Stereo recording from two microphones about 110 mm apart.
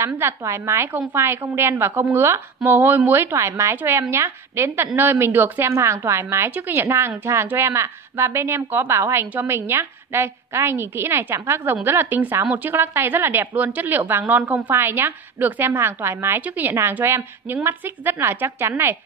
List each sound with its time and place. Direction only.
0.0 s a woman's voice: 25° right (ahead or behind)